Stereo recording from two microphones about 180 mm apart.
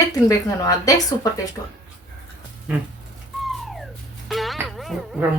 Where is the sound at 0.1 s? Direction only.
20° left (ahead or behind).